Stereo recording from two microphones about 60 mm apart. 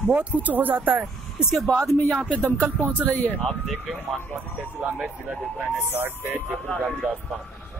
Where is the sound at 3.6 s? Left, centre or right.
Centre.